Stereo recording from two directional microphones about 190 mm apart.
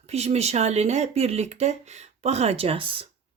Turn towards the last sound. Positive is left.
turn(degrees=-30)  # may be behind; listen again after turning